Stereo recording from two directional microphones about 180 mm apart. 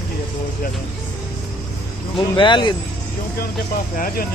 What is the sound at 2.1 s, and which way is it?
Speech, 25° left (ahead or behind).